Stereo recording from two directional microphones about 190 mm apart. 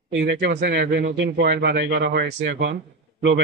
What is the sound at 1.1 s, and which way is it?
Speech, 65° right (ahead or behind).